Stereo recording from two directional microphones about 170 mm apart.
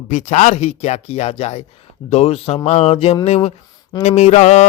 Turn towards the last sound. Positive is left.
turn(degrees=40)  # may be behind; listen again after turning